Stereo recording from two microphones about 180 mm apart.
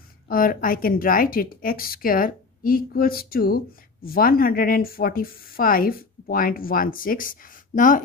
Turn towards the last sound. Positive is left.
turn(degrees=45)  # may be behind; listen again after turning